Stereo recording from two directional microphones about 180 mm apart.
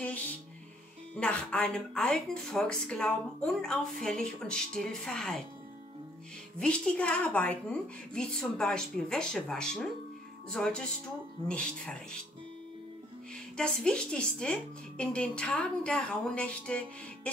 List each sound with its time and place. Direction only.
1.1 s a woman's voice: 5° left (ahead or behind)
6.6 s a woman's voice: 5° left (ahead or behind)
13.6 s a woman's voice: 5° left (ahead or behind)